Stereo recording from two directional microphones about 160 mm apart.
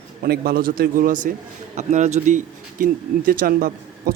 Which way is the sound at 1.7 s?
45° right (ahead or behind).